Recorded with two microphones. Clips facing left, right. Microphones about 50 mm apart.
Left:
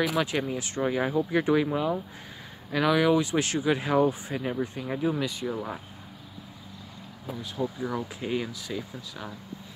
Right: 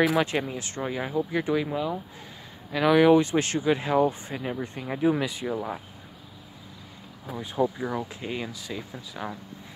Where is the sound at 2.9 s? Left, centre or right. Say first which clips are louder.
Right 5 dB; centre.